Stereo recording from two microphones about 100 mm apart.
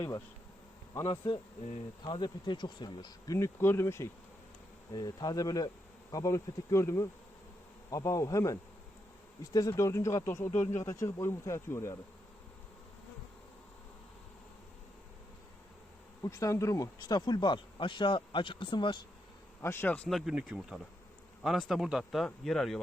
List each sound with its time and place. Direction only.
0.9 s insect: 35° left (ahead or behind)
2.0 s speech: 50° left (ahead or behind)
3.2 s speech: 30° left (ahead or behind)
4.9 s insect: 40° left (ahead or behind)
9.4 s speech: 35° left (ahead or behind)
16.2 s speech: 30° left (ahead or behind); by 18.9 s 55° left (ahead or behind)
19.6 s speech: 25° left (ahead or behind)
20.1 s speech: centre (ahead or behind)